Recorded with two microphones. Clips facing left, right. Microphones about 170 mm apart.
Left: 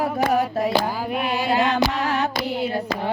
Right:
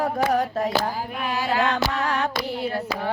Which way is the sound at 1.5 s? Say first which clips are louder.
Left 2 dB; 15° left (ahead or behind).